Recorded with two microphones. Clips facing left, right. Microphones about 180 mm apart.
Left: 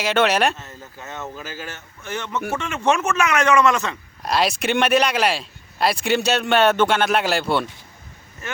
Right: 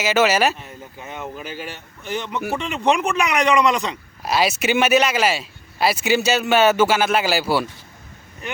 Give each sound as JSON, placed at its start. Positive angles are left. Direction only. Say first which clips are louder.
{"t": 0.0, "sound": "speech", "louder": "right 1 dB", "side_deg": -5}
{"t": 0.9, "sound": "speech", "louder": "right 1 dB", "side_deg": -15}
{"t": 4.2, "sound": "speech", "louder": "right 1 dB", "side_deg": -5}